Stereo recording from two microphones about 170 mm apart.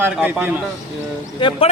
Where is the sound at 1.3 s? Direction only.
30° left (ahead or behind).